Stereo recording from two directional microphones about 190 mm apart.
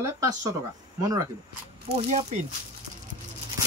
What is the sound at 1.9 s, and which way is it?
Speech, 40° right (ahead or behind).